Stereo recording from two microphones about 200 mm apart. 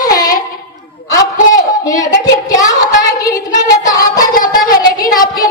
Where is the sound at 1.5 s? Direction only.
15° left (ahead or behind).